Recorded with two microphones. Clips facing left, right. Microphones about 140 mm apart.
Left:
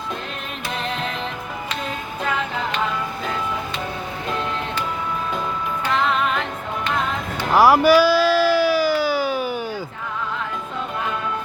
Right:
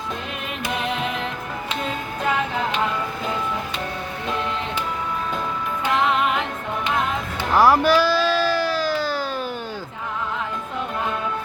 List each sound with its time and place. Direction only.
0.8 s music: 10° right (ahead or behind)
5.9 s music: 15° right (ahead or behind)
7.5 s music: 5° left (ahead or behind)